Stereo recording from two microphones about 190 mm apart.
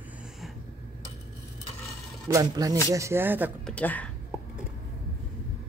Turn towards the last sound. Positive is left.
turn(degrees=10)  # may be behind; listen again after turning